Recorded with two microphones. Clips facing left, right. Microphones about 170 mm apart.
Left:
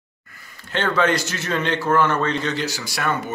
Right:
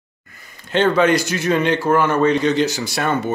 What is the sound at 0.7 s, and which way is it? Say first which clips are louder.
A man's voice: right 5 dB; 15° right (ahead or behind).